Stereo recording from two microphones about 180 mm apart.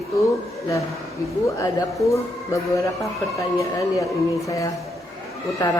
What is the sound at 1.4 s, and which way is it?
Speech, 15° left (ahead or behind).